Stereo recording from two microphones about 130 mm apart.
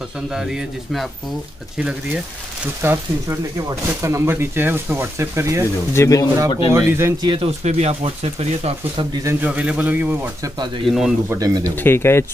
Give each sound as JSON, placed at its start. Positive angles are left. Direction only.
{"t": 0.3, "sound": "speech", "side_deg": -5}
{"t": 2.8, "sound": "speech", "side_deg": -20}
{"t": 5.9, "sound": "speech", "side_deg": 25}
{"t": 6.7, "sound": "speech", "side_deg": -20}
{"t": 7.2, "sound": "speech", "side_deg": -40}
{"t": 7.6, "sound": "speech", "side_deg": -55}
{"t": 9.2, "sound": "speech", "side_deg": -15}
{"t": 10.9, "sound": "speech", "side_deg": -5}
{"t": 11.2, "sound": "speech", "side_deg": -25}
{"t": 11.7, "sound": "speech", "side_deg": 15}